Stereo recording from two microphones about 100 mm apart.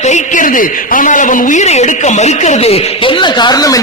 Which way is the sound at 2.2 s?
90° left.